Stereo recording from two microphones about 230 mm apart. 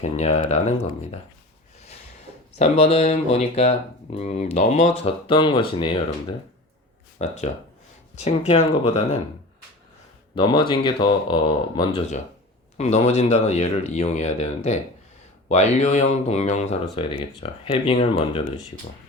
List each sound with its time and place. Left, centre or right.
0.0 s speech: left
2.6 s speech: left
7.2 s speech: left
10.3 s speech: left